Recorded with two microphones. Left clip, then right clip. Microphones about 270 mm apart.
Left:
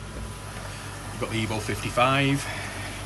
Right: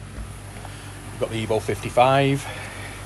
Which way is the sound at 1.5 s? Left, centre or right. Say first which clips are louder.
Right 10 dB; centre.